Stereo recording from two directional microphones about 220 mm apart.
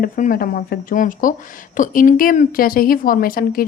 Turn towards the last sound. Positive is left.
turn(degrees=40)  # may be behind; listen again after turning